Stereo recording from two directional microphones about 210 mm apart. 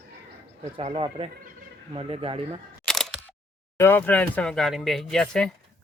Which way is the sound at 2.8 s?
Centre (ahead or behind).